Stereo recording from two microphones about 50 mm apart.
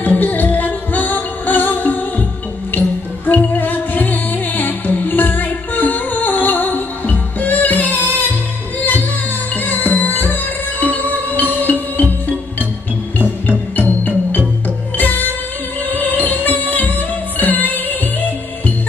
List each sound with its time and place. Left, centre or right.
0.0 s music: left
3.3 s music: left
9.7 s music: left